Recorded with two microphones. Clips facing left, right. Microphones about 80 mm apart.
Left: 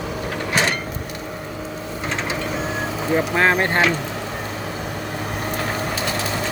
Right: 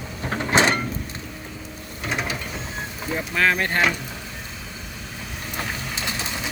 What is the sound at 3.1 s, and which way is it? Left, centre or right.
Speech, left.